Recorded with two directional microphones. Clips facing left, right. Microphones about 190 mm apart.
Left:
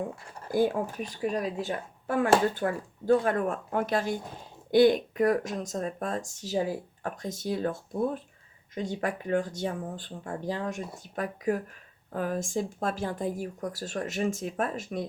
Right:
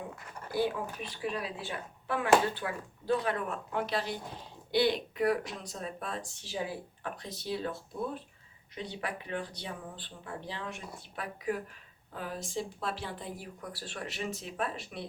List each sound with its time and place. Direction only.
0.5 s speech: 45° left (ahead or behind)